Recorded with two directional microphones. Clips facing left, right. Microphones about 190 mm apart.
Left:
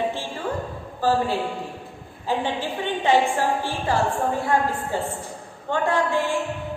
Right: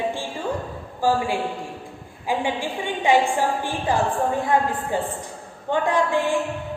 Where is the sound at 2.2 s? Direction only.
10° right (ahead or behind).